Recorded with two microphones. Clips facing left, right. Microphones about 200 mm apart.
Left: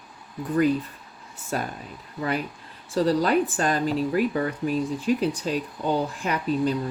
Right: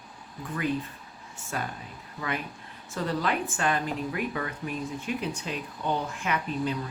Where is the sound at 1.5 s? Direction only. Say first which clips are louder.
Left 5 dB; 35° left (ahead or behind).